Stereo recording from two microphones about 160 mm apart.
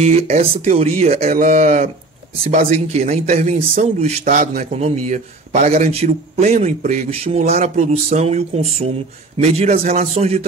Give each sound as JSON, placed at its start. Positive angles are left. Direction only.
{"t": 0.0, "sound": "a man's voice", "side_deg": -45}